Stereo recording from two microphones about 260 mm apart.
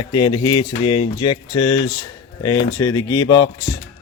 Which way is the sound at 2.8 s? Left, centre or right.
Centre.